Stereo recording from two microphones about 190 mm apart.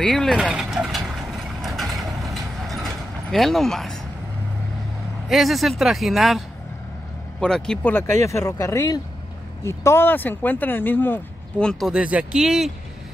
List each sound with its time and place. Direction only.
0.0 s vehicle: centre (ahead or behind)
2.0 s mechanisms: centre (ahead or behind)
5.3 s speech: centre (ahead or behind)